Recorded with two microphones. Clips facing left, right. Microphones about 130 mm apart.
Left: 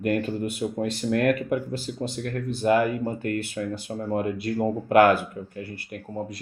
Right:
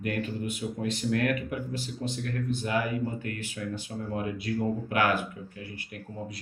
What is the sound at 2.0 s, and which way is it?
Speech, 40° left (ahead or behind).